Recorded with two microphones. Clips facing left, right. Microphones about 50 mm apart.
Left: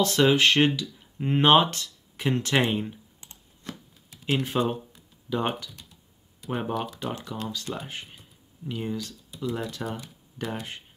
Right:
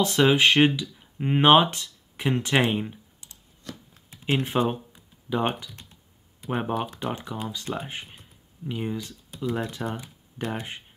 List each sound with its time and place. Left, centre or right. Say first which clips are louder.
0.0 s speech: right 1 dB; centre
3.2 s computer keyboard: left 1 dB; left
4.1 s computer keyboard: right 1 dB; right
6.4 s speech: right 2 dB; centre